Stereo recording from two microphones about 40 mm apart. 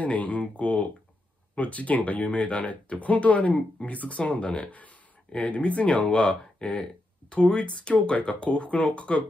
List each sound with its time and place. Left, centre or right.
0.0 s speech: left